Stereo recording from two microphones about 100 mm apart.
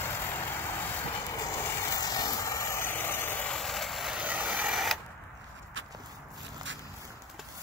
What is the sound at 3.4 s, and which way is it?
Vehicle, 5° left (ahead or behind).